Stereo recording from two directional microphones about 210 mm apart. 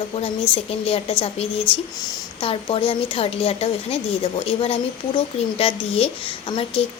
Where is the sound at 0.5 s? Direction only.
25° left (ahead or behind).